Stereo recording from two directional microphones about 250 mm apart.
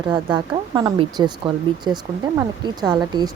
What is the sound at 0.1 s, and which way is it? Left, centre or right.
A woman's voice, centre.